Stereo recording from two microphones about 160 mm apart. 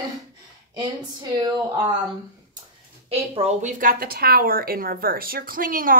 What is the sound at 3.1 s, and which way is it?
A woman's voice, 40° right (ahead or behind).